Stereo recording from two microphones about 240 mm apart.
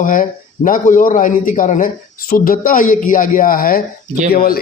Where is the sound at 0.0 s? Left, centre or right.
Left.